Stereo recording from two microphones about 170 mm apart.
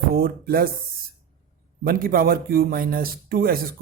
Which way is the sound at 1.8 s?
60° right (ahead or behind).